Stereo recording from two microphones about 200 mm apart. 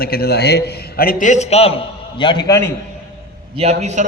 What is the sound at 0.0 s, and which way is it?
A man's voice, 50° left (ahead or behind).